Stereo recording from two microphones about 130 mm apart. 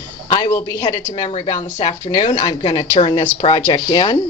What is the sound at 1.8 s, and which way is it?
Speech, 70° left (ahead or behind).